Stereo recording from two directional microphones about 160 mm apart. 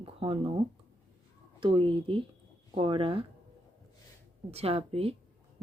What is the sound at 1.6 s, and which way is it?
A woman's voice, 30° right (ahead or behind).